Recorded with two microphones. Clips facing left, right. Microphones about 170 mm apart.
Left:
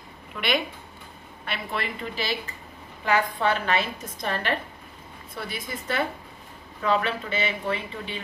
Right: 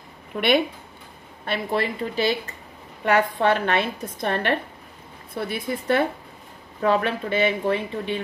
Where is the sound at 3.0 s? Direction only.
65° right (ahead or behind).